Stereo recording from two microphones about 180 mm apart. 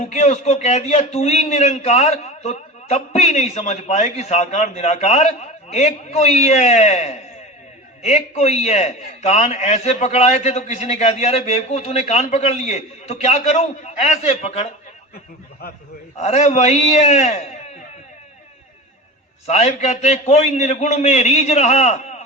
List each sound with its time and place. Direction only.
0.0 s a man's voice: 40° left (ahead or behind)
16.1 s a man's voice: 40° left (ahead or behind)
19.5 s a man's voice: 40° left (ahead or behind)